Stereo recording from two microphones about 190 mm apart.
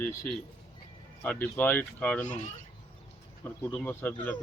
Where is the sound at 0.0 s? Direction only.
15° left (ahead or behind).